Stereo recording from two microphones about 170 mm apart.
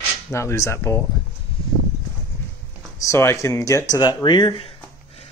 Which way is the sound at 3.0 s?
15° left (ahead or behind).